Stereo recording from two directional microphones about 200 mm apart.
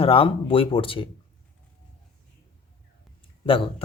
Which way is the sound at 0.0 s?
25° left (ahead or behind).